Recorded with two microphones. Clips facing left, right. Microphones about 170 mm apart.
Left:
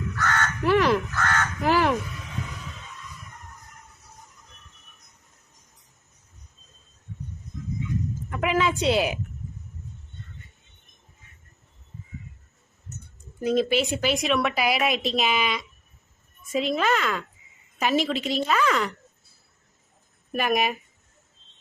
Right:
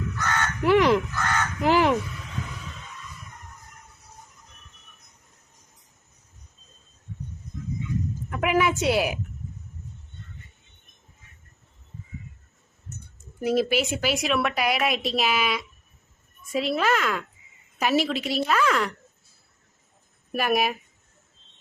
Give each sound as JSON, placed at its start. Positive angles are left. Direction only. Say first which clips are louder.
{"t": 0.2, "sound": "crow", "louder": "left 1 dB", "side_deg": -15}
{"t": 8.3, "sound": "a sound", "louder": "right 1 dB", "side_deg": -10}
{"t": 13.4, "sound": "a woman's voice", "louder": "even", "side_deg": -5}
{"t": 20.3, "sound": "a woman's voice", "louder": "even", "side_deg": -5}